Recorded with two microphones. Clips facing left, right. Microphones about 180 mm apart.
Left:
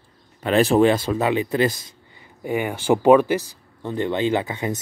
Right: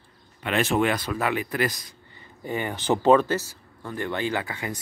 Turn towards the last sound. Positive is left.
turn(degrees=20)  # may be behind; listen again after turning